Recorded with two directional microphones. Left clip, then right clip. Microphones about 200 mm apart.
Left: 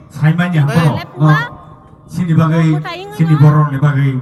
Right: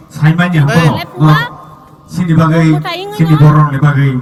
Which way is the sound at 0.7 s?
5° left (ahead or behind).